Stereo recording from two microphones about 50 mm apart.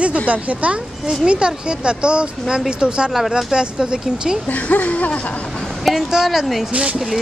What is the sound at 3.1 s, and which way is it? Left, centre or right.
Speech, centre.